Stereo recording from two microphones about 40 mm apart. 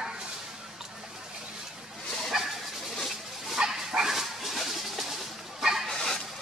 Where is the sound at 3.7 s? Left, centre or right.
Centre.